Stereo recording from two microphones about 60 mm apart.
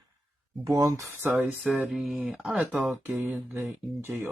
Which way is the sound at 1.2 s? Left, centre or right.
Right.